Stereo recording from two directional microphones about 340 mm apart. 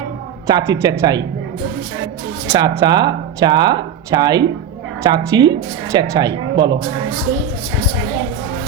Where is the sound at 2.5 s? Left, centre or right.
Centre.